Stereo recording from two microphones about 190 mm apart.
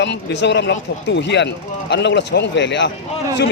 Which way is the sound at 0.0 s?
65° left (ahead or behind).